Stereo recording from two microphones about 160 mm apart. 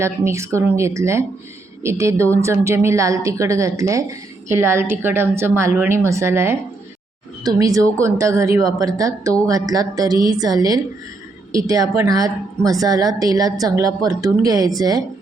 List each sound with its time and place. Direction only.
0.0 s a woman's voice: 15° right (ahead or behind)